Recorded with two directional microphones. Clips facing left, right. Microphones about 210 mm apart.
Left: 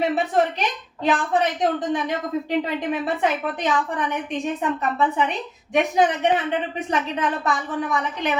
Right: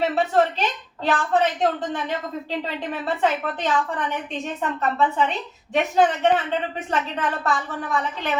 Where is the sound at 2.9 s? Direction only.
15° left (ahead or behind).